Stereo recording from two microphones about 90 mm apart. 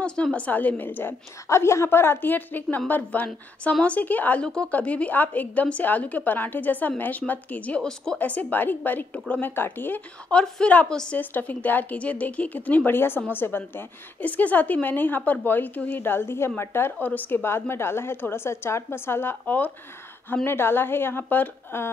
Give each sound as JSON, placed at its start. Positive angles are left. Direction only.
{"t": 0.0, "sound": "a woman's voice", "side_deg": 10}
{"t": 8.2, "sound": "a woman's voice", "side_deg": 20}
{"t": 10.3, "sound": "a woman's voice", "side_deg": 10}